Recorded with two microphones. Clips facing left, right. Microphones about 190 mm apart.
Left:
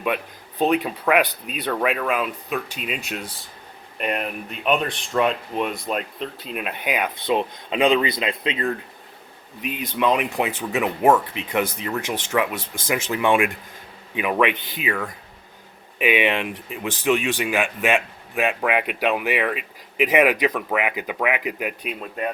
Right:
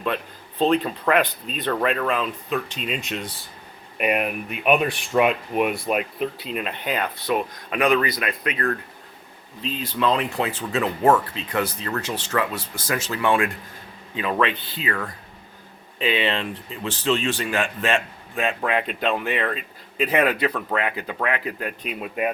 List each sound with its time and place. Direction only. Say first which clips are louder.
0.6 s speech: even; 10° left (ahead or behind)
3.9 s speech: right 3 dB; 10° right (ahead or behind)
6.5 s speech: even; 5° left (ahead or behind)
7.3 s speech: left 3 dB; 25° left (ahead or behind)
22.0 s speech: right 3 dB; 10° right (ahead or behind)